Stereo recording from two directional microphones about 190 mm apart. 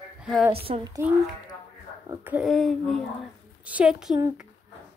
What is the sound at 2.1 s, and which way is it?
Speech, 10° right (ahead or behind).